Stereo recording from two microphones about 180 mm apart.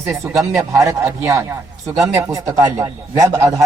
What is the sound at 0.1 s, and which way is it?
A man's voice, 15° right (ahead or behind).